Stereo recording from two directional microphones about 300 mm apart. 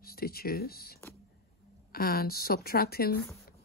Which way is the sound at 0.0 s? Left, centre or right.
Left.